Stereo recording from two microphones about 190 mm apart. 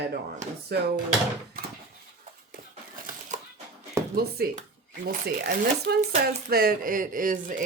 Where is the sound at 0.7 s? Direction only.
60° right (ahead or behind).